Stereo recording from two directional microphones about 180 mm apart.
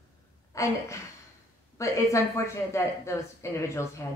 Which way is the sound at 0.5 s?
15° left (ahead or behind).